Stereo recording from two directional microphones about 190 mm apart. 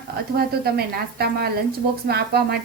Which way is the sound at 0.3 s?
55° right (ahead or behind).